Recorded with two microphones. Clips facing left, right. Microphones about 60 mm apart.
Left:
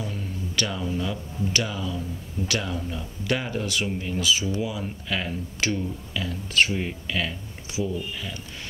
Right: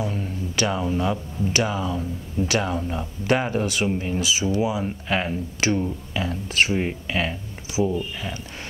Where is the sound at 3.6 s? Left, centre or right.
Right.